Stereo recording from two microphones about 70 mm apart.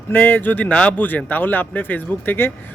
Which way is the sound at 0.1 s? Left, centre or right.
Left.